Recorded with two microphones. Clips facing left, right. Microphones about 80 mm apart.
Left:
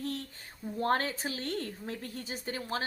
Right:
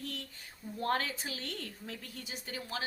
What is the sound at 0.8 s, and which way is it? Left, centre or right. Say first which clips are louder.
Speech: left 4 dB; left.